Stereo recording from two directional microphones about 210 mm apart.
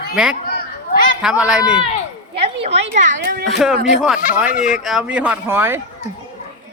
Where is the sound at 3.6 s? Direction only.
Centre (ahead or behind).